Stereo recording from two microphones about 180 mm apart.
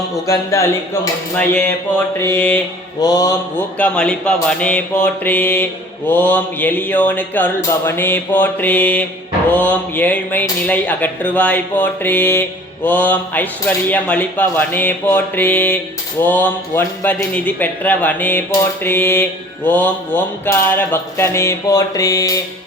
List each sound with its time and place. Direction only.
0.3 s speech: 15° left (ahead or behind)
3.0 s mantra: 20° left (ahead or behind)
3.8 s speech: 5° left (ahead or behind)